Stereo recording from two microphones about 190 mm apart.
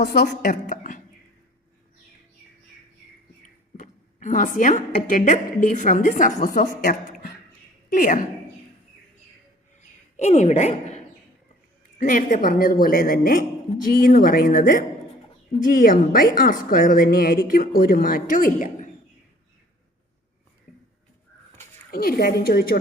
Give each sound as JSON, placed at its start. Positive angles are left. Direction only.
{"t": 0.0, "sound": "a woman's voice", "side_deg": 40}
{"t": 3.8, "sound": "a woman's voice", "side_deg": 40}
{"t": 10.2, "sound": "a woman's voice", "side_deg": 35}
{"t": 21.9, "sound": "a woman's voice", "side_deg": 50}